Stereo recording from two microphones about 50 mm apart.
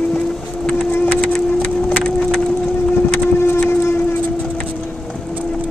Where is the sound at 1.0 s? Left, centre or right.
Left.